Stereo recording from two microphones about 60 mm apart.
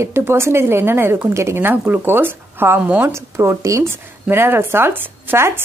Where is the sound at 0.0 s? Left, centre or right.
Right.